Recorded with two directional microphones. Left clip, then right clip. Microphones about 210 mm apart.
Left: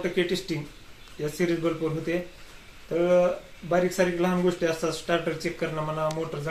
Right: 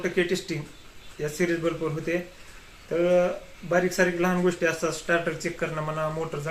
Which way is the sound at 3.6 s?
10° left (ahead or behind).